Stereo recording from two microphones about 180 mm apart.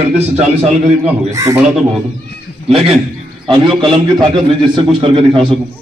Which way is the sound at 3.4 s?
30° right (ahead or behind).